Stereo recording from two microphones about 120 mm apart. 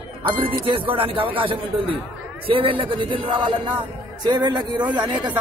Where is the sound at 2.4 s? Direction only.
50° right (ahead or behind).